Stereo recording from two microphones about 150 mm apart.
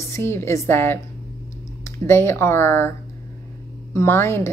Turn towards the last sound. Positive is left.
turn(degrees=15)  # may be behind; listen again after turning